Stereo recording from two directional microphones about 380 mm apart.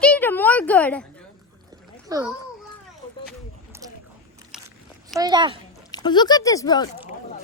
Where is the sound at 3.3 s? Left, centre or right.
Centre.